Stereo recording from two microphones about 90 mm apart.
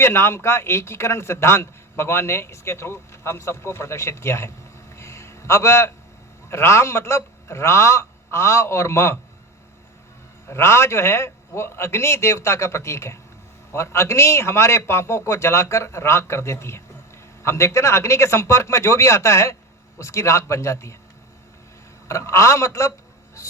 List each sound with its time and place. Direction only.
0.0 s a man's voice: 30° left (ahead or behind)
10.5 s a man's voice: 30° left (ahead or behind)
22.0 s a man's voice: 30° left (ahead or behind)